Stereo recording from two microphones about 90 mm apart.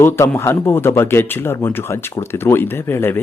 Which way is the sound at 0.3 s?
30° left (ahead or behind).